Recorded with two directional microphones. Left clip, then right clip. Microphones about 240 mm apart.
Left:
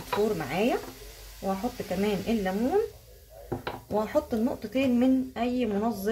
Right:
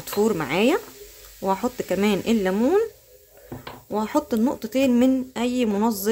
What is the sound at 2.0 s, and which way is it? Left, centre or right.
Speech, right.